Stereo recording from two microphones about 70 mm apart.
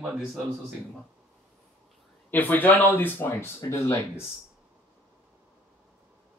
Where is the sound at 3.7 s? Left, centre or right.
Left.